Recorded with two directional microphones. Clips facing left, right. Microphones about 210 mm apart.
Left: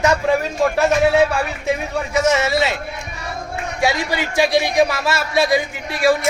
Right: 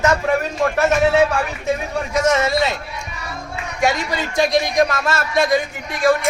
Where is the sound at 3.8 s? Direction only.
10° left (ahead or behind).